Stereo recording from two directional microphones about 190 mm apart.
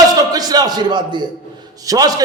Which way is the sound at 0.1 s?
20° right (ahead or behind).